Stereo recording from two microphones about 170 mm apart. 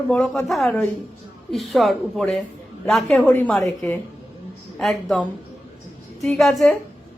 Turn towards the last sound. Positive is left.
turn(degrees=0)  # may be behind; listen again after turning